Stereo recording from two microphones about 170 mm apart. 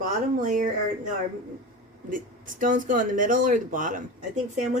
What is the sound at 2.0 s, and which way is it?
Speech, 50° right (ahead or behind).